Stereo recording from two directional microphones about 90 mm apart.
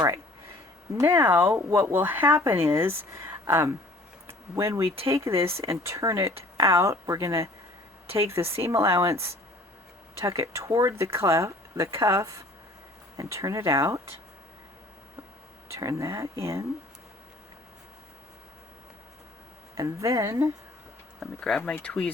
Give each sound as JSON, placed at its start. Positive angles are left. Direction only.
{"t": 0.9, "sound": "speech", "side_deg": -30}
{"t": 8.0, "sound": "speech", "side_deg": -90}
{"t": 8.3, "sound": "speech", "side_deg": -30}
{"t": 15.8, "sound": "speech", "side_deg": -40}
{"t": 19.7, "sound": "speech", "side_deg": -40}
{"t": 21.2, "sound": "speech", "side_deg": 5}